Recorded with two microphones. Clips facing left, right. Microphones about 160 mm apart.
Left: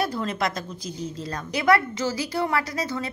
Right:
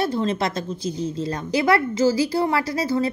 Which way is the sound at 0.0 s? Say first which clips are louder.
Right 4 dB; 25° right (ahead or behind).